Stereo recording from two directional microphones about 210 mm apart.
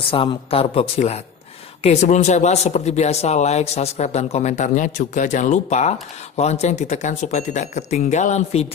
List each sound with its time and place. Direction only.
0.1 s a woman's voice: 25° left (ahead or behind)